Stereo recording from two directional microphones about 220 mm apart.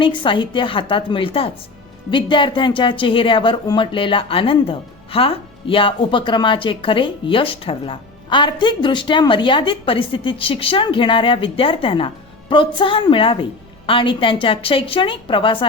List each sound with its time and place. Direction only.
0.0 s a woman's voice: 20° left (ahead or behind)